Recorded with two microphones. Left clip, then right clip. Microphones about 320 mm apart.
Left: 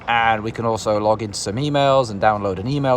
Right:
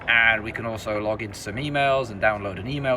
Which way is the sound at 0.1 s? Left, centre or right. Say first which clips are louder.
Left 1 dB; centre.